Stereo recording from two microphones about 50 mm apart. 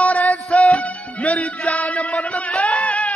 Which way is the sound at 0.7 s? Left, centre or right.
Left.